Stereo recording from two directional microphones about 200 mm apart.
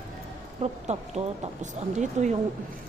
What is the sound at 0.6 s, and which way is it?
Speech, 30° right (ahead or behind).